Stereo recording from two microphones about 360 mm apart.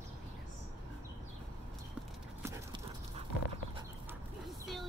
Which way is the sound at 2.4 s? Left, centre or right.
Centre.